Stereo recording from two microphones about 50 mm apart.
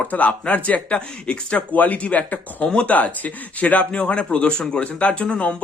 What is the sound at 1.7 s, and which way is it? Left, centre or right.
Speech, left.